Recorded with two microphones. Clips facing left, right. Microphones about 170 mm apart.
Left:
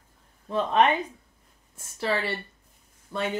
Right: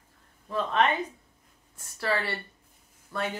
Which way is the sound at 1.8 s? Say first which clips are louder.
Left 2 dB; 20° left (ahead or behind).